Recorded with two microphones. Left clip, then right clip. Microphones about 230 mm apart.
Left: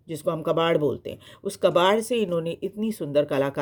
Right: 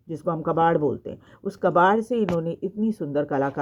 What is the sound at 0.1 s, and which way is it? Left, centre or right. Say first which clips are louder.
Speech: even; left.